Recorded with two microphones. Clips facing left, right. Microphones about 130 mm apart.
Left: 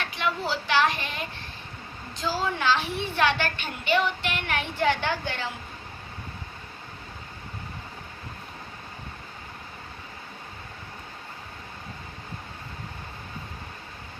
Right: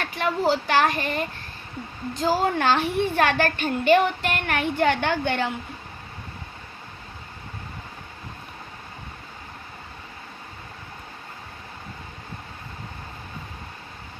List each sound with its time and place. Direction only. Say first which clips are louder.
0.0 s a woman's voice: right 5 dB; 45° right (ahead or behind)